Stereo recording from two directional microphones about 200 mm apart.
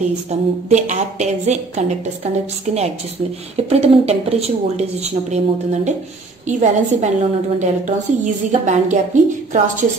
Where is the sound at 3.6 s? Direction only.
30° right (ahead or behind).